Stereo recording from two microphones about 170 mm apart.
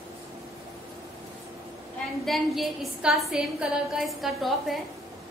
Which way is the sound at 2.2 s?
Centre (ahead or behind).